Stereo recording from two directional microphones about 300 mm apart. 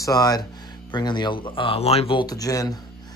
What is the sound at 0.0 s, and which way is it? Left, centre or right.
Speech, centre.